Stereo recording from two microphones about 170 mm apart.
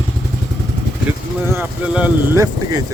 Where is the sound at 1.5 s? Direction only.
10° right (ahead or behind).